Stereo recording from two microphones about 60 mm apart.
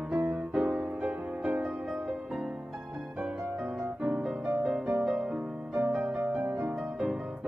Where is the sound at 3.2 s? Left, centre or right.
Centre.